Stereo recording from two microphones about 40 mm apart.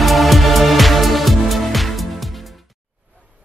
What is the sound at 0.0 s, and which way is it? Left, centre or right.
Music, centre.